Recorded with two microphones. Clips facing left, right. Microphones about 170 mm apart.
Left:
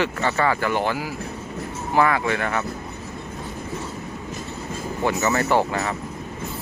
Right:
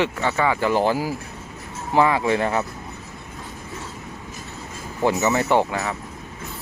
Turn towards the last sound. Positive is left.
turn(degrees=-5)  # may be behind; listen again after turning